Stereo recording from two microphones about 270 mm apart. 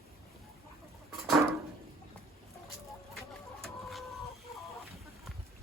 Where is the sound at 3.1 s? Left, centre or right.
Centre.